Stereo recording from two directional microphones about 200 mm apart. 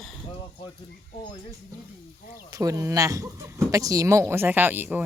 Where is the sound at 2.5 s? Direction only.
15° right (ahead or behind).